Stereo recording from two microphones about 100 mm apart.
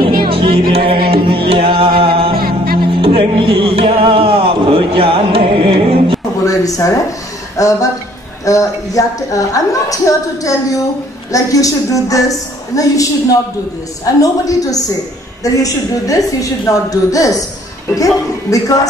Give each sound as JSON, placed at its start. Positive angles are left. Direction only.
{"t": 0.0, "sound": "music", "side_deg": -60}
{"t": 6.4, "sound": "a sound", "side_deg": 35}
{"t": 8.5, "sound": "a woman's voice", "side_deg": 35}